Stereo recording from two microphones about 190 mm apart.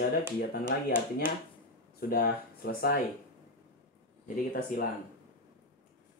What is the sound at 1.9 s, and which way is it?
Speech, 55° left (ahead or behind).